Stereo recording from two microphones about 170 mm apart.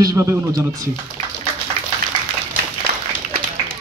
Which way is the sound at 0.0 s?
20° right (ahead or behind).